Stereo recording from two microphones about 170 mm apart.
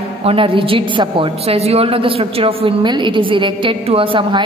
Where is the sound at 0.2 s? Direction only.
35° right (ahead or behind).